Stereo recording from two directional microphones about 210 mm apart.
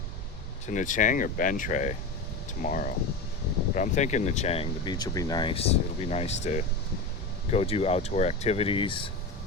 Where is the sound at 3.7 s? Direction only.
35° left (ahead or behind).